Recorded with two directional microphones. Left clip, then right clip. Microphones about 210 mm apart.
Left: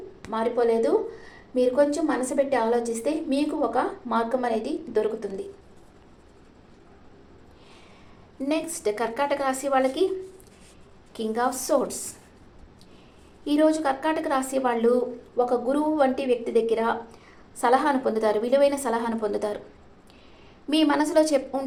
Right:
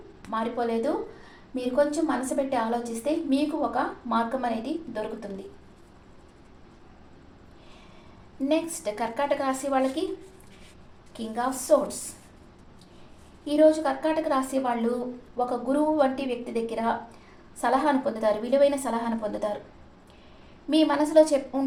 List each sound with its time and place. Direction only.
0.3 s a woman's voice: 35° left (ahead or behind)
8.4 s a woman's voice: 35° left (ahead or behind)
11.1 s a woman's voice: 35° left (ahead or behind)
13.4 s a woman's voice: 40° left (ahead or behind)
20.7 s a woman's voice: 40° left (ahead or behind)